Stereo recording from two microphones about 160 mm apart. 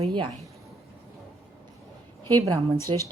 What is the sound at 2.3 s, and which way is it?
Speech, 20° right (ahead or behind).